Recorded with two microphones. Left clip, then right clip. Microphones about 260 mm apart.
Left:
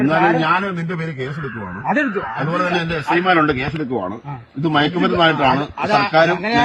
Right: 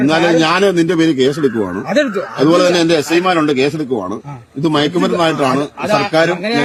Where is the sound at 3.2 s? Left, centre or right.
Right.